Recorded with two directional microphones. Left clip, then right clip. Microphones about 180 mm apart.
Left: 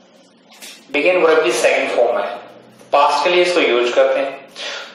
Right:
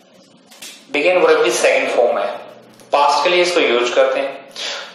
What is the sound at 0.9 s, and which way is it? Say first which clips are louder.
Speech: right 1 dB; 20° right (ahead or behind).